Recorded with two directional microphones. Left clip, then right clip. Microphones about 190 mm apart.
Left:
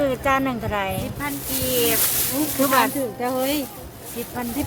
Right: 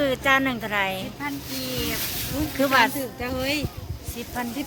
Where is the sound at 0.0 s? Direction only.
Centre (ahead or behind).